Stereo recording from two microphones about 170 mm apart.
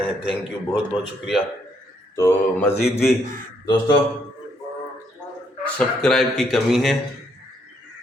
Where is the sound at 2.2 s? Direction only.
15° left (ahead or behind).